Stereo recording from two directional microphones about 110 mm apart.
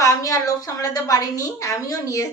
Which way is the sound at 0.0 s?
30° left (ahead or behind).